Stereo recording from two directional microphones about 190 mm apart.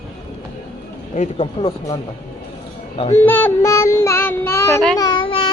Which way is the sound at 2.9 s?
30° left (ahead or behind).